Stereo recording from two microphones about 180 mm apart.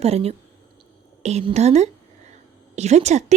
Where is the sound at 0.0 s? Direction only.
35° right (ahead or behind).